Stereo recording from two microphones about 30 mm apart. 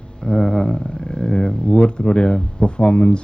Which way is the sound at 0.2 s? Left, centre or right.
Left.